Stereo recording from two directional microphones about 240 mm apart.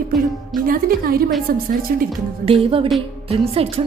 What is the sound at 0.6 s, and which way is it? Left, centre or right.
Speech, right.